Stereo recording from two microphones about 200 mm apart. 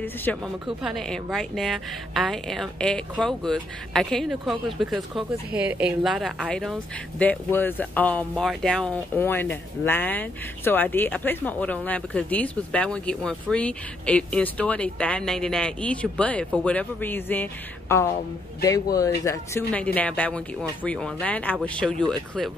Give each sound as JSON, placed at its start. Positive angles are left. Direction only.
{"t": 0.0, "sound": "a woman's voice", "side_deg": 10}